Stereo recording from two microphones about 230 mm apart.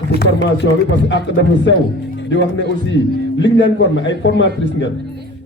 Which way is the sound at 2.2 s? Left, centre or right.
Left.